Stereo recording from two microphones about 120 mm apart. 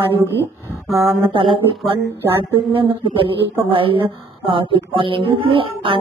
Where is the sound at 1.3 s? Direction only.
45° right (ahead or behind).